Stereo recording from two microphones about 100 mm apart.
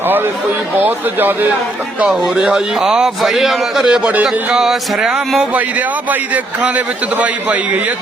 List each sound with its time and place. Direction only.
0.8 s speech: 20° right (ahead or behind)
2.0 s a man's voice: 10° right (ahead or behind)